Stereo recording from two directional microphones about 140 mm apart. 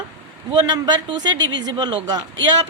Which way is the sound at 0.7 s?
30° right (ahead or behind).